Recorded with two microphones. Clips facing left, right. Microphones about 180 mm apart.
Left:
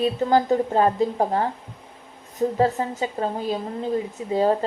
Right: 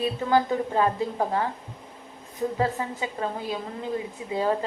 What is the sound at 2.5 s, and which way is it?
Speech, 40° left (ahead or behind).